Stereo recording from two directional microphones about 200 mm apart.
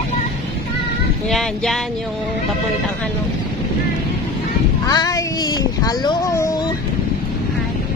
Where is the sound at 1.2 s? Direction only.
Centre (ahead or behind).